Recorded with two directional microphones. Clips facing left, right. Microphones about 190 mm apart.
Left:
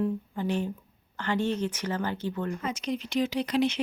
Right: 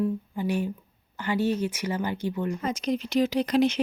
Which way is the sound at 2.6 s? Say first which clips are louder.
Right 4 dB; 40° right (ahead or behind).